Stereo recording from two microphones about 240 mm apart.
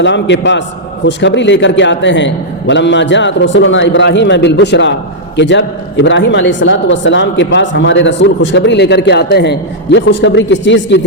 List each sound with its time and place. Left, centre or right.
0.0 s a man's voice: left